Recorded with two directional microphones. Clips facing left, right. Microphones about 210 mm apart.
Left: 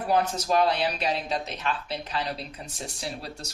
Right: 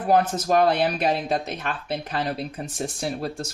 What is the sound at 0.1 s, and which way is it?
Speech, 50° right (ahead or behind).